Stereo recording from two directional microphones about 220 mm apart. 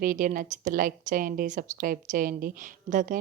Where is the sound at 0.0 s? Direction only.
40° right (ahead or behind).